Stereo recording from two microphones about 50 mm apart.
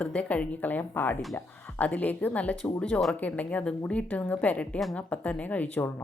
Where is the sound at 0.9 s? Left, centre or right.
Left.